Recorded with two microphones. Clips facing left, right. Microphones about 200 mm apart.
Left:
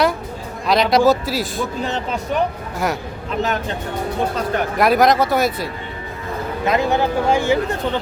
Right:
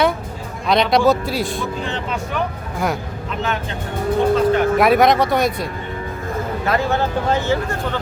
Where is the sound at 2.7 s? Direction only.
Centre (ahead or behind).